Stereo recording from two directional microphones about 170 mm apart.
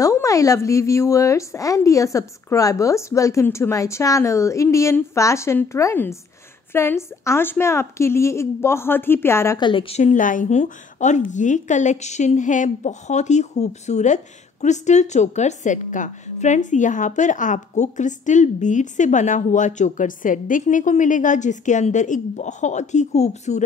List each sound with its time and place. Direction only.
0.0 s speech: 20° left (ahead or behind)
9.6 s a woman's voice: 30° left (ahead or behind)